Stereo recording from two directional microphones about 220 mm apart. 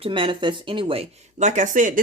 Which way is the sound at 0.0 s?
25° right (ahead or behind).